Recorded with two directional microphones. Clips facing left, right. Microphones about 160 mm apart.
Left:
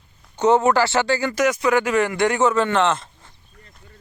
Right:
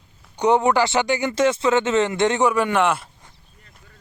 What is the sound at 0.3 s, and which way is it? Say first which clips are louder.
Speech: left 1 dB; 15° right (ahead or behind).